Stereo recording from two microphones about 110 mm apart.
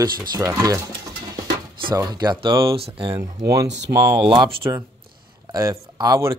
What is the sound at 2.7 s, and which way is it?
Speech, 55° right (ahead or behind).